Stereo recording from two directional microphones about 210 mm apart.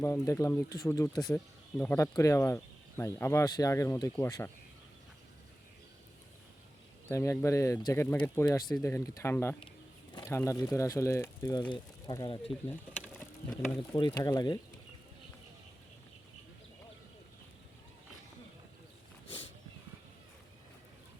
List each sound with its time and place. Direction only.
0.0 s speech: 15° left (ahead or behind)
7.1 s speech: 15° left (ahead or behind)
13.1 s a sound: 5° left (ahead or behind)
13.9 s speech: 20° left (ahead or behind)